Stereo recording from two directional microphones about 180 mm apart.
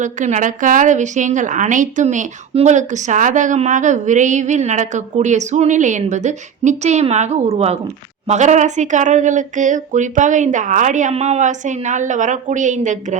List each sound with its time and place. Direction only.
0.0 s a woman's voice: 45° right (ahead or behind)